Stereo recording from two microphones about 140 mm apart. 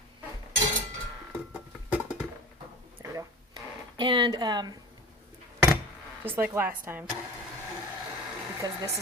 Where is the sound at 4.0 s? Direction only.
35° right (ahead or behind).